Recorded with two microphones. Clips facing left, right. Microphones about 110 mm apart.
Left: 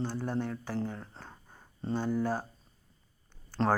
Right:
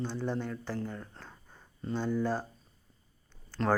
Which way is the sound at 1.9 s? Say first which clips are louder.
Even; 10° left (ahead or behind).